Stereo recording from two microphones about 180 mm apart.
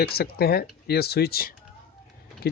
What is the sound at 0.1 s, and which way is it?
Speech, 60° left (ahead or behind).